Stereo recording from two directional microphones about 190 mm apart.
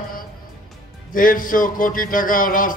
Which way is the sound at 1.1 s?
45° left (ahead or behind).